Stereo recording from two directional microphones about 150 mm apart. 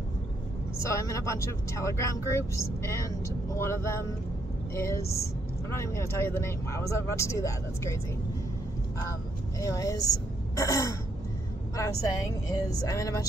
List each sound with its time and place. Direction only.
0.8 s speech: 20° left (ahead or behind)
9.6 s speech: 20° left (ahead or behind)